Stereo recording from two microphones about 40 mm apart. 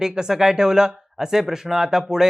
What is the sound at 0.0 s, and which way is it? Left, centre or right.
Speech, centre.